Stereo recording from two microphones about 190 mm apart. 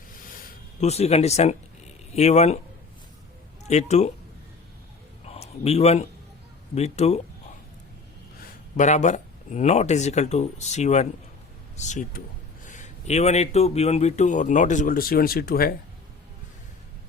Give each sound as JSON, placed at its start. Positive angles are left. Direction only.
{"t": 0.8, "sound": "a man's voice", "side_deg": 35}
{"t": 3.7, "sound": "a man's voice", "side_deg": 35}
{"t": 5.2, "sound": "a sound", "side_deg": 35}
{"t": 6.7, "sound": "a man's voice", "side_deg": 35}
{"t": 8.7, "sound": "a man's voice", "side_deg": 40}